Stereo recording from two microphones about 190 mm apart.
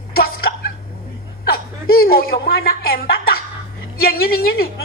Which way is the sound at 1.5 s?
50° left (ahead or behind).